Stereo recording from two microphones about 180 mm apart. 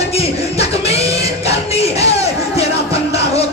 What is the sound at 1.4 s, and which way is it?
Music, 35° left (ahead or behind).